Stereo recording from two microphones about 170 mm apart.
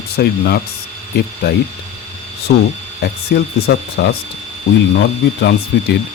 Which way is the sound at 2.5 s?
65° left (ahead or behind).